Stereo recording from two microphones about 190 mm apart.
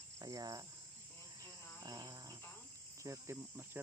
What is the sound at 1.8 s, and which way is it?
Cricket, 20° right (ahead or behind).